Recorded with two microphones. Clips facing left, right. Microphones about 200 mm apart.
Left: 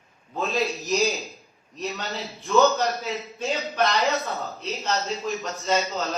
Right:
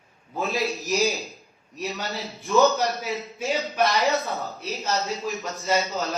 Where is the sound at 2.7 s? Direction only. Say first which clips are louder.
Even; 15° right (ahead or behind).